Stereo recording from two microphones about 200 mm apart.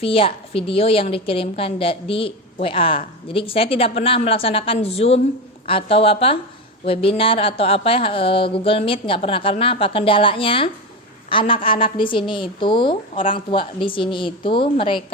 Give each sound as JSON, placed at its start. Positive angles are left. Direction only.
{"t": 0.0, "sound": "speech", "side_deg": 30}